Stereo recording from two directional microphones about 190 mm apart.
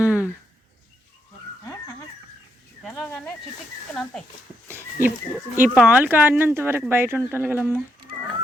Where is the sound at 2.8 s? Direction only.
5° left (ahead or behind).